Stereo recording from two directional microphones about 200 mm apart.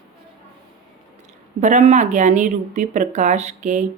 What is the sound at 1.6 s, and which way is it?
Speech, 35° right (ahead or behind).